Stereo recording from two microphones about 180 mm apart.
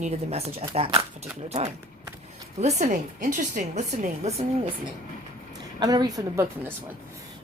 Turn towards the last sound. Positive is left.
turn(degrees=-15)  # may be behind; listen again after turning